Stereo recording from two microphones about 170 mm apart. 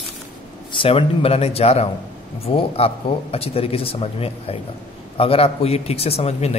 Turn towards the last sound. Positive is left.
turn(degrees=35)  # may be behind; listen again after turning